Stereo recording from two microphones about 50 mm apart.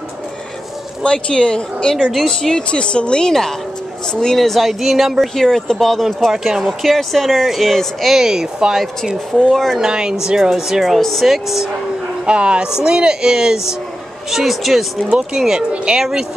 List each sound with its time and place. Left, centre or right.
1.0 s speech: centre
2.7 s speech: centre
5.3 s speech: centre
6.3 s speech: centre
6.9 s speech: centre
8.2 s speech: centre
9.5 s speech: centre
9.8 s speech: centre
10.8 s speech: centre
12.3 s speech: centre
15.0 s speech: centre